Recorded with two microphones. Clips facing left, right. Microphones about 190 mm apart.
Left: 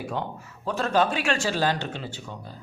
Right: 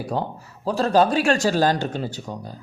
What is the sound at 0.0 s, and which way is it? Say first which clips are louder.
Speech: right 4 dB; 35° right (ahead or behind).